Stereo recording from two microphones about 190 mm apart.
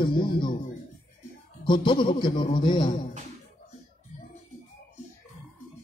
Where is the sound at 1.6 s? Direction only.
25° left (ahead or behind).